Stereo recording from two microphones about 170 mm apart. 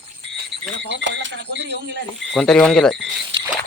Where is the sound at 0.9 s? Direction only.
90° right.